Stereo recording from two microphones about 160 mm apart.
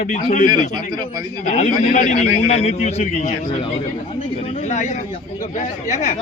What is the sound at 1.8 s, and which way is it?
A man's voice, 50° left (ahead or behind).